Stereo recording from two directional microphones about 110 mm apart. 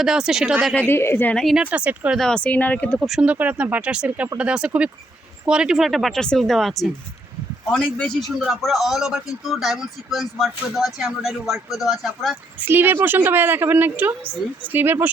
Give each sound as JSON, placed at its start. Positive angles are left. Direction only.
{"t": 0.0, "sound": "speech", "side_deg": -5}
{"t": 0.9, "sound": "a woman's voice", "side_deg": 20}
{"t": 1.4, "sound": "speech", "side_deg": 0}
{"t": 1.6, "sound": "speech", "side_deg": -10}
{"t": 2.1, "sound": "speech", "side_deg": 5}
{"t": 3.0, "sound": "speech", "side_deg": -10}
{"t": 12.5, "sound": "speech", "side_deg": -20}